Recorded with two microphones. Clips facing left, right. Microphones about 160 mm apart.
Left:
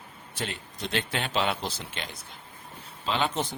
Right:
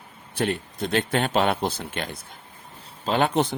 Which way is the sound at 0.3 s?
55° right (ahead or behind).